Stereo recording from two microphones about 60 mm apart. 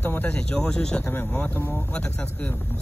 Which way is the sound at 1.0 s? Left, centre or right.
Left.